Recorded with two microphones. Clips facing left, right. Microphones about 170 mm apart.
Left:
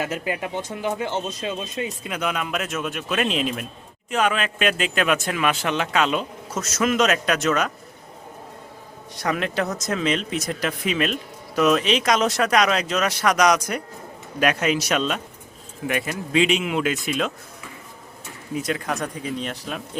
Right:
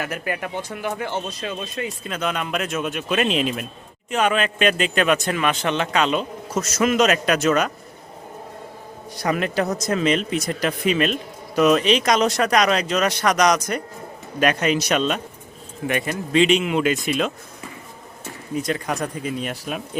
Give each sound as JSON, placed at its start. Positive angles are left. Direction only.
{"t": 0.0, "sound": "speech", "side_deg": 20}
{"t": 9.1, "sound": "speech", "side_deg": 0}
{"t": 18.5, "sound": "speech", "side_deg": 5}